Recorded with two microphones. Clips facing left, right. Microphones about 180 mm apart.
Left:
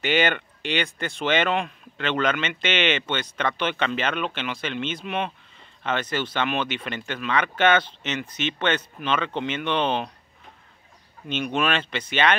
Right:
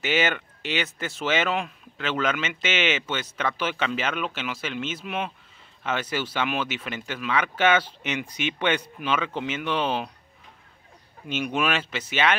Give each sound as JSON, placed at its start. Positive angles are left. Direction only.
{"t": 0.0, "sound": "speech", "side_deg": -5}
{"t": 11.2, "sound": "speech", "side_deg": -10}